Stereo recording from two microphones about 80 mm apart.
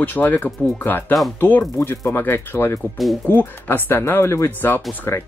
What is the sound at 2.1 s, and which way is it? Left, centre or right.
Speech, left.